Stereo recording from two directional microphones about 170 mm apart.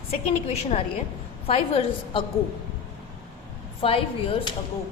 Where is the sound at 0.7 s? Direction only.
40° left (ahead or behind).